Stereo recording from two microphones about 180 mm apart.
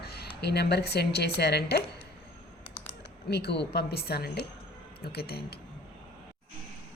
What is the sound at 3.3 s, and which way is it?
A woman's voice, 65° left (ahead or behind).